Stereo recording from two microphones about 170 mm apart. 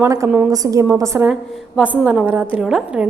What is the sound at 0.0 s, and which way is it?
A woman's voice, 20° right (ahead or behind).